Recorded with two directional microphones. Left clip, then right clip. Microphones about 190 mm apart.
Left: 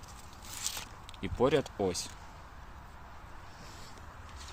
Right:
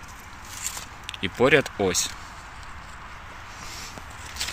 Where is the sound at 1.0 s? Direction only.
5° left (ahead or behind).